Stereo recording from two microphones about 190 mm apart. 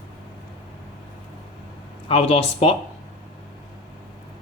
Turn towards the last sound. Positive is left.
turn(degrees=30)  # may be behind; listen again after turning